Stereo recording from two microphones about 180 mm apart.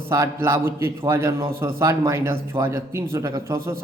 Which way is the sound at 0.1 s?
15° right (ahead or behind).